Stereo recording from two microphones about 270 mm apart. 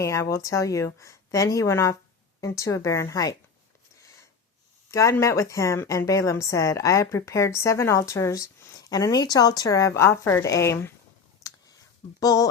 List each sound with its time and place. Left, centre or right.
0.0 s a woman's voice: centre
3.9 s a sound: centre
4.9 s a woman's voice: centre
11.4 s clicking: centre
12.2 s a woman's voice: centre